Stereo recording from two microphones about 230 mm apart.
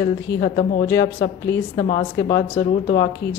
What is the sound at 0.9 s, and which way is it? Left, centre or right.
Speech, centre.